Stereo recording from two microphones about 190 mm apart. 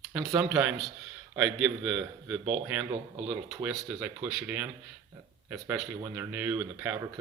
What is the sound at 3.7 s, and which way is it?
Speech, 5° right (ahead or behind).